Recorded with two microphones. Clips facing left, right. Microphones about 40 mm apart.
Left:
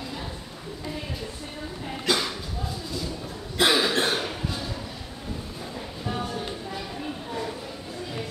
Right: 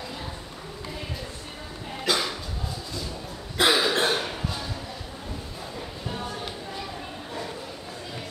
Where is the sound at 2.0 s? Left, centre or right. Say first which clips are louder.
Even; centre.